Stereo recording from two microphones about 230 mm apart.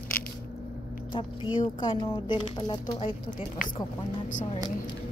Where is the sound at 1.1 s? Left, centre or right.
Centre.